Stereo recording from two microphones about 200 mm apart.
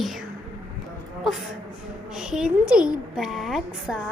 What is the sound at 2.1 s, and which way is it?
A woman's voice, 5° right (ahead or behind).